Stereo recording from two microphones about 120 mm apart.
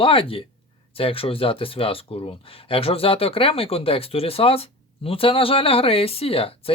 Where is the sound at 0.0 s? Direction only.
50° left (ahead or behind).